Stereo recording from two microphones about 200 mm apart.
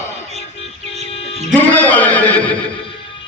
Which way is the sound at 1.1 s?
30° left (ahead or behind).